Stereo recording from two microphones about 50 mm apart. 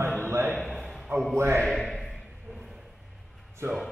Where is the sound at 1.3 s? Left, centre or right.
Right.